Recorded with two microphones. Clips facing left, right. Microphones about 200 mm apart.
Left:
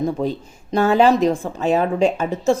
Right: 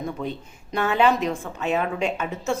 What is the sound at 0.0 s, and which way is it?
A woman's voice, 35° left (ahead or behind).